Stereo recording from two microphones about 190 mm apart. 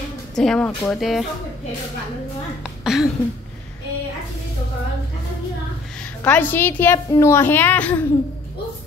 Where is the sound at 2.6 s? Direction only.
Centre (ahead or behind).